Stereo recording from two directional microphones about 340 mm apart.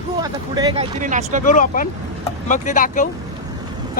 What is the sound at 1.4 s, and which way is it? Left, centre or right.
Speech, left.